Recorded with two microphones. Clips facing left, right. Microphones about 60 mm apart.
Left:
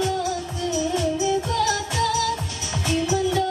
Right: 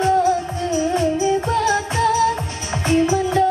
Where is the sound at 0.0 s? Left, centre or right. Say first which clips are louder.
Right 8 dB; right.